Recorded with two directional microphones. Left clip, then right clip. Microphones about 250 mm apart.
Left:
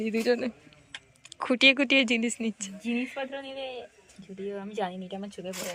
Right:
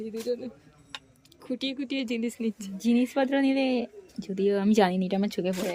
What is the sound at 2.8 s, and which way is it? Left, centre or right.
Speech, right.